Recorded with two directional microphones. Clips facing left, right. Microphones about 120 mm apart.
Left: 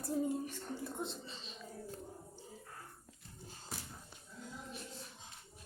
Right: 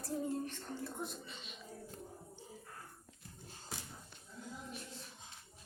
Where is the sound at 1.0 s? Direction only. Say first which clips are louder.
Left 1 dB; 30° left (ahead or behind).